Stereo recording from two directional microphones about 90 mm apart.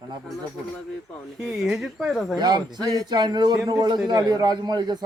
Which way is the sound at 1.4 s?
Centre (ahead or behind).